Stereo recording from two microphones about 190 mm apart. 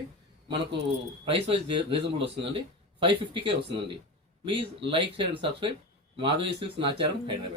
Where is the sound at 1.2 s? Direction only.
30° right (ahead or behind).